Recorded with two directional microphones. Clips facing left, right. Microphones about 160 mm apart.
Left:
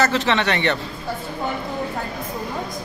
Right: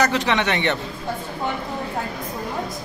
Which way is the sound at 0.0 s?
15° right (ahead or behind).